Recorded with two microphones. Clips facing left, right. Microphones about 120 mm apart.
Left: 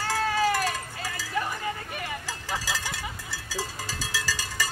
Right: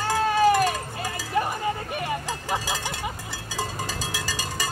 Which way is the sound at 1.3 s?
25° right (ahead or behind).